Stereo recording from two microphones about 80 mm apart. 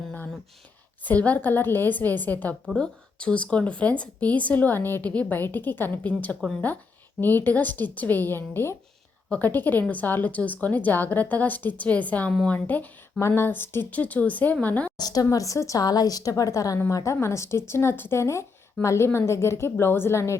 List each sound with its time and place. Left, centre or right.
1.0 s a woman's voice: centre
13.1 s a woman's voice: left
14.9 s a woman's voice: left